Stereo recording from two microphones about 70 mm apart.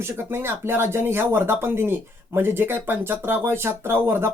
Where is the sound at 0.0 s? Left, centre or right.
Right.